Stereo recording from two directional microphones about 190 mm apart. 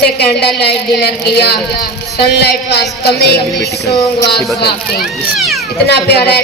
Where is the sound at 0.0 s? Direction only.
60° left (ahead or behind).